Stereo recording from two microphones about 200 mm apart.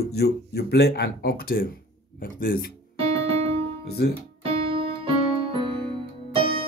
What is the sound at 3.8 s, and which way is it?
Music, 55° left (ahead or behind).